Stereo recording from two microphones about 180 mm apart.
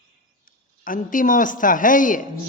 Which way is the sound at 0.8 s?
50° left (ahead or behind).